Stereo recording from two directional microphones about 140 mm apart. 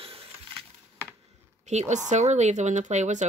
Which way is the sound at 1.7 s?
55° right (ahead or behind).